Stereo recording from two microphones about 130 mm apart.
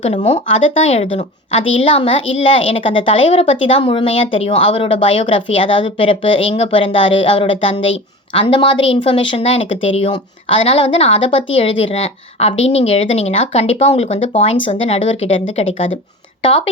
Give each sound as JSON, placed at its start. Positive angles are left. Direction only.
{"t": 0.3, "sound": "a woman's voice", "side_deg": 50}